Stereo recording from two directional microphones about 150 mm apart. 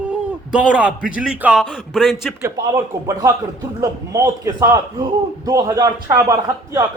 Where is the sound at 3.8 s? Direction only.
20° right (ahead or behind).